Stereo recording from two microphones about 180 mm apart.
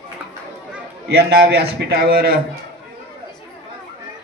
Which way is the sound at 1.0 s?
65° right (ahead or behind).